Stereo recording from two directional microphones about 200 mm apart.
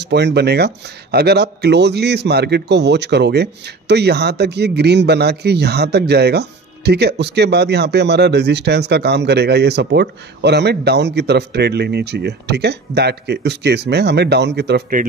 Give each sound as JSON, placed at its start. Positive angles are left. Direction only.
{"t": 0.0, "sound": "speech", "side_deg": -55}